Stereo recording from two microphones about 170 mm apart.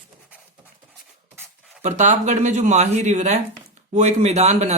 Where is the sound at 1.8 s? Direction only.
40° right (ahead or behind).